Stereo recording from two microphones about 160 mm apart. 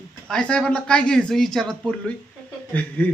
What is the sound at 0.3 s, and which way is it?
Speech, 5° left (ahead or behind).